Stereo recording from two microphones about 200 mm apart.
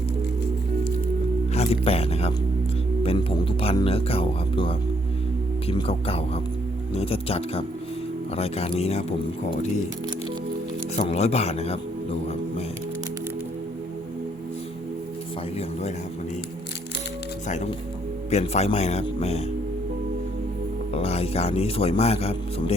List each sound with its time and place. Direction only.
1.5 s speech: 30° left (ahead or behind)
10.9 s speech: 30° left (ahead or behind)
18.3 s speech: 35° left (ahead or behind)
20.9 s a man's voice: 30° left (ahead or behind)